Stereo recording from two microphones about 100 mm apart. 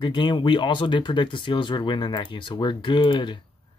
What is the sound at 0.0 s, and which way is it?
Speech, 50° left (ahead or behind).